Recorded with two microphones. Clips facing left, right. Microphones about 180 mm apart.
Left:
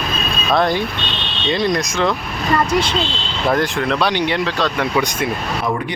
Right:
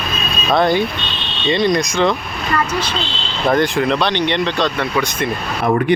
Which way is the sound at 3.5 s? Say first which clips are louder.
Right 3 dB; centre (ahead or behind).